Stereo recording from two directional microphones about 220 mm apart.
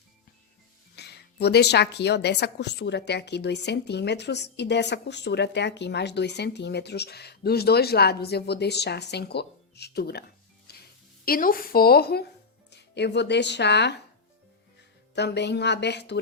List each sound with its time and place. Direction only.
0.9 s a woman's voice: 50° left (ahead or behind)
10.7 s music: 45° left (ahead or behind)
11.3 s a woman's voice: 40° left (ahead or behind)
15.1 s a woman's voice: 50° left (ahead or behind)